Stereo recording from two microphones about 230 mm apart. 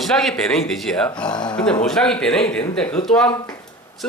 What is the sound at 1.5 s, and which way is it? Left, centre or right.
Speech, centre.